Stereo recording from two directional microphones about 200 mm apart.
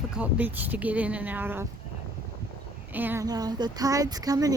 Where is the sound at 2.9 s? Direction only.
10° right (ahead or behind).